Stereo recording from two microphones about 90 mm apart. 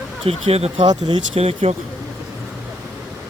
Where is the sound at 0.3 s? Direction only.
90° right.